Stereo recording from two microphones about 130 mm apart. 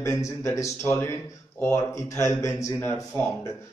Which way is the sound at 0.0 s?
25° left (ahead or behind).